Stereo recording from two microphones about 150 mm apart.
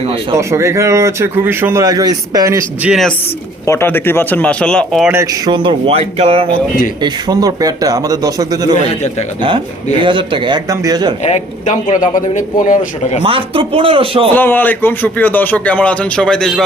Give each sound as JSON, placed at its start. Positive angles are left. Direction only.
{"t": 0.3, "sound": "a man's voice", "side_deg": -20}
{"t": 2.8, "sound": "a man's voice", "side_deg": -5}
{"t": 3.7, "sound": "a man's voice", "side_deg": 15}
{"t": 5.1, "sound": "speech", "side_deg": -25}
{"t": 7.0, "sound": "a man's voice", "side_deg": -25}
{"t": 10.0, "sound": "speech", "side_deg": -35}
{"t": 11.2, "sound": "a man's voice", "side_deg": 50}
{"t": 13.2, "sound": "speech", "side_deg": -35}
{"t": 14.3, "sound": "a man's voice", "side_deg": 15}